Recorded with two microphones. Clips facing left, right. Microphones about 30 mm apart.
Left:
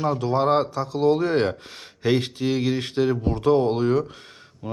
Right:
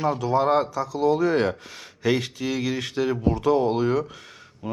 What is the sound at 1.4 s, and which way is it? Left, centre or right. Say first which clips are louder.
Speech: left 1 dB; left.